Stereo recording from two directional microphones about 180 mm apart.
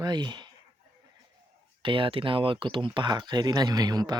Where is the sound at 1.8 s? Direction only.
30° right (ahead or behind).